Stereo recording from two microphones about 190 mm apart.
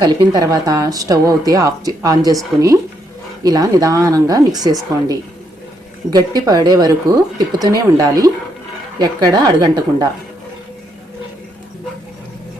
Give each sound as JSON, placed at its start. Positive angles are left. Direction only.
{"t": 0.0, "sound": "speech", "side_deg": -20}
{"t": 3.4, "sound": "speech", "side_deg": -20}